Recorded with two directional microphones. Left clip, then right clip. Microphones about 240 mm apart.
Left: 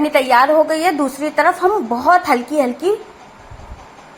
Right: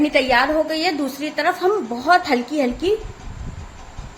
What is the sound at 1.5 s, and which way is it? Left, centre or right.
A woman's voice, centre.